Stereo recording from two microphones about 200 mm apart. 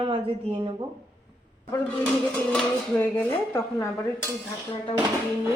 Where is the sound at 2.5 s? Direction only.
5° left (ahead or behind).